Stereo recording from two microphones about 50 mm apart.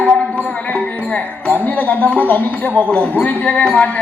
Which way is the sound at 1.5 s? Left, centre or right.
Left.